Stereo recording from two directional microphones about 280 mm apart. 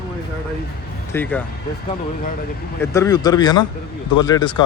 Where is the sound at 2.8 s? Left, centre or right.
Centre.